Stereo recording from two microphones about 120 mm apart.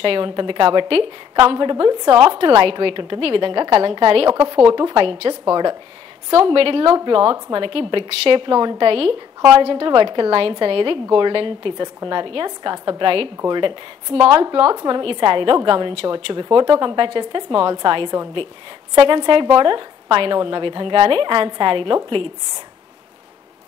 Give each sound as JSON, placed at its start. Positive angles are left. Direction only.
{"t": 0.0, "sound": "a woman's voice", "side_deg": -45}
{"t": 5.4, "sound": "a woman's voice", "side_deg": -35}
{"t": 6.3, "sound": "a woman's voice", "side_deg": -50}